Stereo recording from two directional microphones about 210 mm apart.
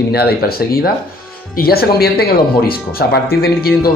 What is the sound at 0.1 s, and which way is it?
Speech, 50° left (ahead or behind).